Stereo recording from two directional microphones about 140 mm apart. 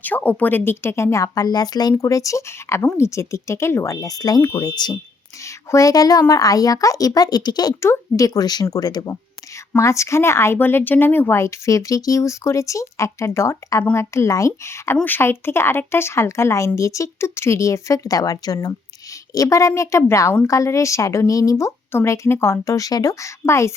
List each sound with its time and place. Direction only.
0.0 s a woman's voice: 10° left (ahead or behind)